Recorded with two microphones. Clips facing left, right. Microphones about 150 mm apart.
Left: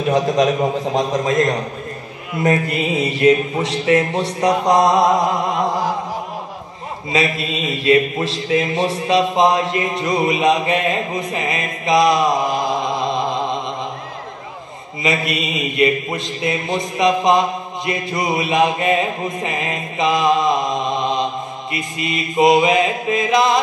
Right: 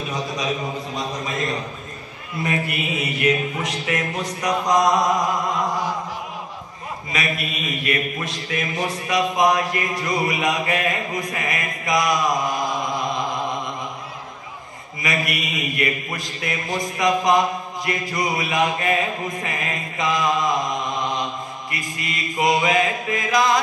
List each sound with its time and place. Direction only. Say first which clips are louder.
0.1 s a man's voice: left 12 dB; 90° left
2.4 s mantra: left 7 dB; 30° left (ahead or behind)
7.1 s a man's voice: left 7 dB; 30° left (ahead or behind)
15.0 s a man's voice: left 5 dB; 25° left (ahead or behind)